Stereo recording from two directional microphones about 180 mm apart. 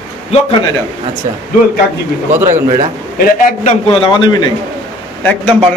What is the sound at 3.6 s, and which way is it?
Speech, 40° left (ahead or behind).